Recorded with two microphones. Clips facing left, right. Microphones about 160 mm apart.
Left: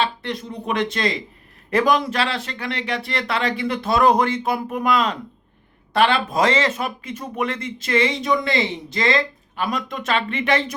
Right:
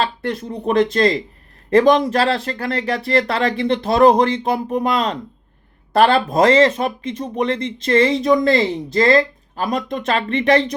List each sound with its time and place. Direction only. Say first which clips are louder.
0.2 s speech: right 5 dB; 45° right (ahead or behind)